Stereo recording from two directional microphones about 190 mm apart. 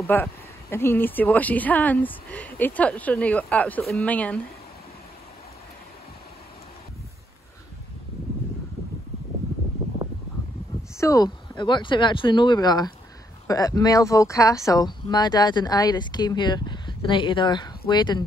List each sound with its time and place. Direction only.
0.0 s speech: 10° left (ahead or behind)
11.0 s speech: 15° left (ahead or behind)